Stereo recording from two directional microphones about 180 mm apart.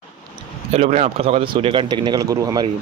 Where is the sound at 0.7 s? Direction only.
35° right (ahead or behind).